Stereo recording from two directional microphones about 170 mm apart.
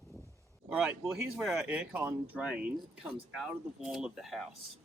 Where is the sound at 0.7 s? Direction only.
5° right (ahead or behind).